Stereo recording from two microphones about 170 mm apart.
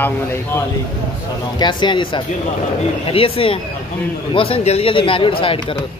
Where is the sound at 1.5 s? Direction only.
25° left (ahead or behind).